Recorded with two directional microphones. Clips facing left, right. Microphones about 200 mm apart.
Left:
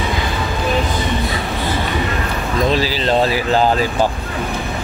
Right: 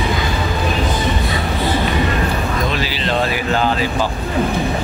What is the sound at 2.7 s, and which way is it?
Speech, 35° left (ahead or behind).